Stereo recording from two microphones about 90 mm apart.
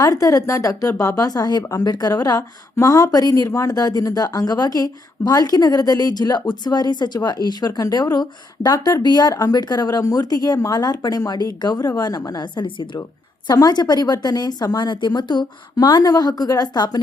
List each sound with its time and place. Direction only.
0.0 s a woman's voice: 40° left (ahead or behind); by 13.0 s 65° left (ahead or behind)
13.5 s speech: 45° left (ahead or behind)